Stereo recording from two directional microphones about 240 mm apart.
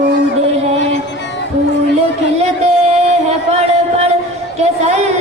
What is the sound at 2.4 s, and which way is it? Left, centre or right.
Music, right.